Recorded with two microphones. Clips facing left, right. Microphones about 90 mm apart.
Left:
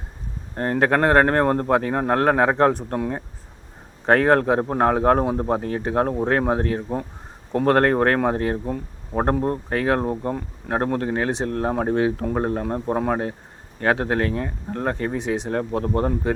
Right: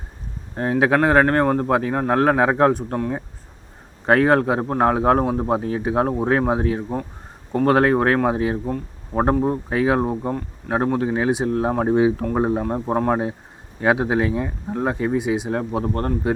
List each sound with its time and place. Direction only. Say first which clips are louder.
0.5 s speech: right 1 dB; centre (ahead or behind)
15.9 s speech: left 1 dB; 10° left (ahead or behind)